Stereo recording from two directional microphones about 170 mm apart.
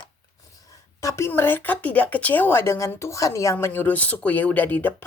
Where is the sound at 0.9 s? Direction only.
15° left (ahead or behind).